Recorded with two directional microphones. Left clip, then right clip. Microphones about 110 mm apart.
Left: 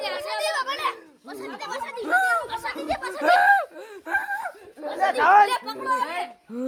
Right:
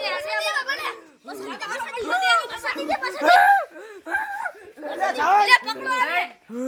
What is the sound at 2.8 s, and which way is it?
Speech, 45° right (ahead or behind).